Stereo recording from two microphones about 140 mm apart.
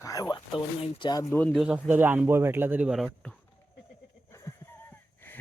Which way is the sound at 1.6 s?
10° right (ahead or behind).